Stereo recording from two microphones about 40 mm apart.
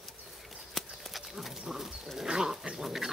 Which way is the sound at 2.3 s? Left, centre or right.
Centre.